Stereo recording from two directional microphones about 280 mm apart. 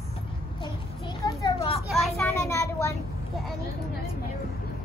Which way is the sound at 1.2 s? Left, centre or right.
Centre.